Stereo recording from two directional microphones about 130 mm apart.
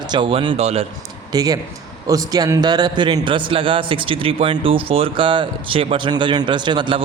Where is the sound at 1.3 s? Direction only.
30° right (ahead or behind).